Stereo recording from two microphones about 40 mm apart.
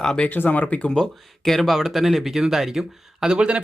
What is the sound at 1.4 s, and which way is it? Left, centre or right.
Speech, centre.